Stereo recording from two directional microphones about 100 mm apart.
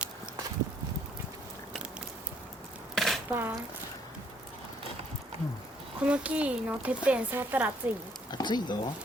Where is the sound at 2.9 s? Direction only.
Centre (ahead or behind).